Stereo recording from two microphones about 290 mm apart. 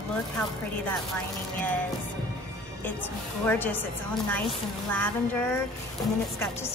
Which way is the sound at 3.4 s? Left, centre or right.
Centre.